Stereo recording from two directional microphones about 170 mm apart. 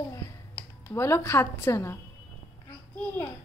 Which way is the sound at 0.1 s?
15° left (ahead or behind).